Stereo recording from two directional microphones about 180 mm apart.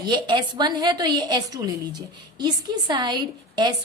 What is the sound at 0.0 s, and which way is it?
A woman's voice, 25° right (ahead or behind).